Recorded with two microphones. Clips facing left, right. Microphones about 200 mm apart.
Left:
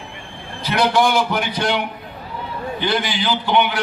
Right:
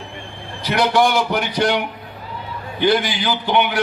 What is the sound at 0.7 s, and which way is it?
A man's voice, 50° right (ahead or behind).